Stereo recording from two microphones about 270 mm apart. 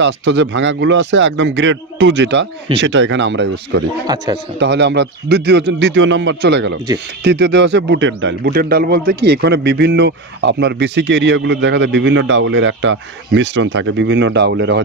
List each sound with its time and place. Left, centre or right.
0.0 s a man's voice: right
4.1 s speech: centre
4.6 s a man's voice: right